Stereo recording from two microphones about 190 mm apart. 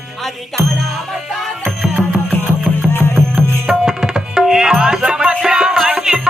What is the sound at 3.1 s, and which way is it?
Tabla, centre (ahead or behind).